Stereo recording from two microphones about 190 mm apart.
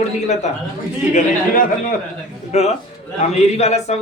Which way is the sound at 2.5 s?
35° left (ahead or behind).